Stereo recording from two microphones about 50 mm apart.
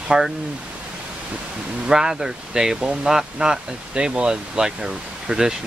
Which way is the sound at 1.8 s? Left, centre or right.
Centre.